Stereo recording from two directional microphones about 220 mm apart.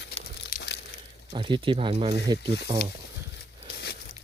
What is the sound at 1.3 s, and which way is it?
Speech, 20° right (ahead or behind).